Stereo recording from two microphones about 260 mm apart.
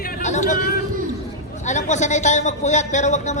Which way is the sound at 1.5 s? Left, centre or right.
Left.